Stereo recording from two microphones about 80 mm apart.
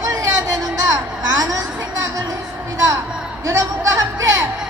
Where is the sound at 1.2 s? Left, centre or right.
Right.